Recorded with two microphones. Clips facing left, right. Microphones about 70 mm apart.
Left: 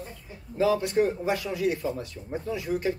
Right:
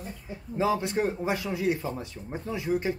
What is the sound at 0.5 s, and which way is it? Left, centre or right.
A man's voice, right.